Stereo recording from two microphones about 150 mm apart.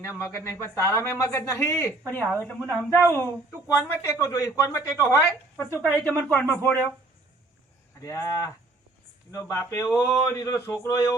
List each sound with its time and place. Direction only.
0.2 s speech: 15° left (ahead or behind)
8.0 s speech: 20° left (ahead or behind)